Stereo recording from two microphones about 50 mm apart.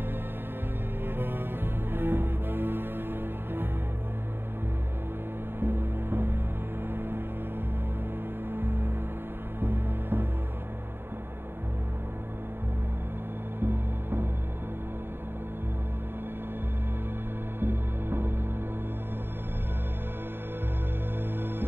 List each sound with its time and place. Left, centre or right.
1.0 s music: right
5.6 s music: right
8.5 s music: right
13.6 s music: right
17.6 s music: right